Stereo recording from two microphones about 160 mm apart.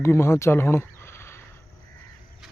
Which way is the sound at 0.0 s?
15° left (ahead or behind).